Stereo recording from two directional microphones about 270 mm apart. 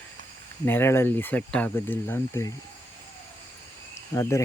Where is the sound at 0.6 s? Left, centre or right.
Centre.